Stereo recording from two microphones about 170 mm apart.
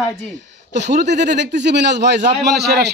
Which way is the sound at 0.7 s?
85° right.